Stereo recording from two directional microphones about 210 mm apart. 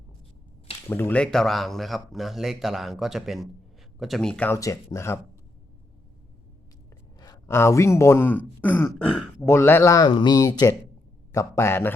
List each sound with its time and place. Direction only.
0.9 s speech: 10° left (ahead or behind)
7.2 s speech: 15° left (ahead or behind)